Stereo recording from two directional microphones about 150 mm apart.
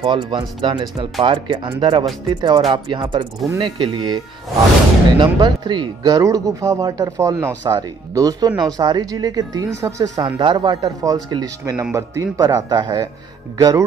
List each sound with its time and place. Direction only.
0.0 s speech: 35° right (ahead or behind)
3.4 s a man's voice: 25° right (ahead or behind)
5.2 s a man's voice: 30° right (ahead or behind)